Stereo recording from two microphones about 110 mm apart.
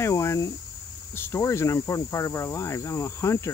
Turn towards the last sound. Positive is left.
turn(degrees=25)  # may be behind; listen again after turning